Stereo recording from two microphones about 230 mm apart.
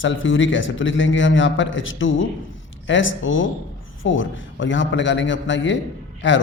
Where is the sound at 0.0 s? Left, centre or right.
Left.